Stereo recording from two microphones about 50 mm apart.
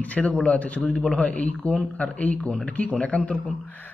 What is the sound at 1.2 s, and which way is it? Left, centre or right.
Speech, left.